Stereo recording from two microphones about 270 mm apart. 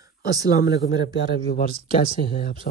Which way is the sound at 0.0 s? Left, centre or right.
Centre.